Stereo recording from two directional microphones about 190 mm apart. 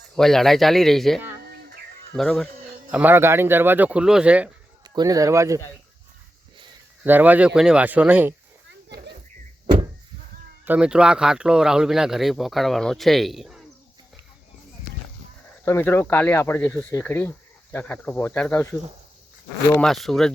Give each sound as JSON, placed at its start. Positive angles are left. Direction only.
{"t": 0.2, "sound": "speech", "side_deg": 0}
{"t": 2.5, "sound": "music", "side_deg": -50}
{"t": 2.9, "sound": "speech", "side_deg": -10}
{"t": 4.8, "sound": "speech", "side_deg": -20}
{"t": 7.0, "sound": "speech", "side_deg": -10}
{"t": 10.7, "sound": "speech", "side_deg": -5}
{"t": 15.6, "sound": "speech", "side_deg": 15}